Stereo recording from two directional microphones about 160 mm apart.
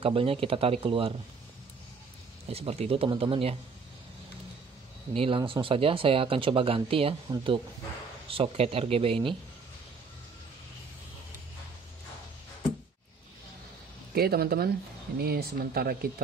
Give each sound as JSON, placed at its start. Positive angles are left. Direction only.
{"t": 0.0, "sound": "speech", "side_deg": -35}
{"t": 2.4, "sound": "speech", "side_deg": -40}
{"t": 5.1, "sound": "speech", "side_deg": -35}
{"t": 14.1, "sound": "speech", "side_deg": -70}